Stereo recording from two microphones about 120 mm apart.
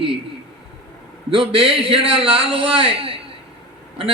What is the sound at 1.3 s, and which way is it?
A man's voice, 50° right (ahead or behind).